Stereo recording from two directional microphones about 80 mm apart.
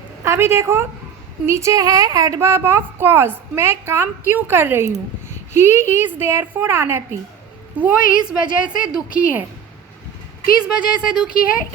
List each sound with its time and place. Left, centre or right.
0.3 s a woman's voice: right
7.8 s a woman's voice: centre
10.6 s a woman's voice: centre